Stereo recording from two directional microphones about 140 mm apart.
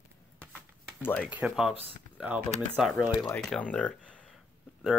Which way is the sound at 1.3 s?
5° right (ahead or behind).